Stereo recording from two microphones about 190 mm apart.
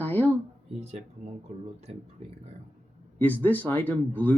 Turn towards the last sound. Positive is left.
turn(degrees=10)  # may be behind; listen again after turning